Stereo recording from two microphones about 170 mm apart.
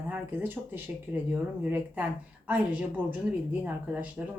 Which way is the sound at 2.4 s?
10° right (ahead or behind).